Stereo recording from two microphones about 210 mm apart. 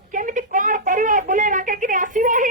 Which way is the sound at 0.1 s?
40° right (ahead or behind).